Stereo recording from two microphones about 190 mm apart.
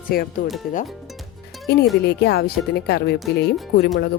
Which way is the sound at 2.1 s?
60° left (ahead or behind).